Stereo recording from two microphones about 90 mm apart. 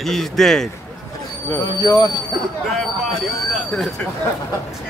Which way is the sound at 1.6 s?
50° left (ahead or behind).